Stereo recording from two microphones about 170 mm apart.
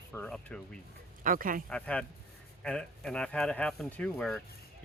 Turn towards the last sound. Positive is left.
turn(degrees=5)  # may be behind; listen again after turning